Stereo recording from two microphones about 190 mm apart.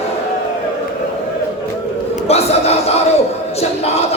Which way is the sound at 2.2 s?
35° left (ahead or behind).